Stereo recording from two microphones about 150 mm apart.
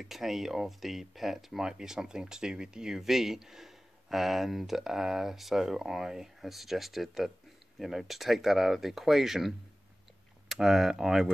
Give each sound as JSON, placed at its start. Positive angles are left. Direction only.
{"t": 0.0, "sound": "speech", "side_deg": 0}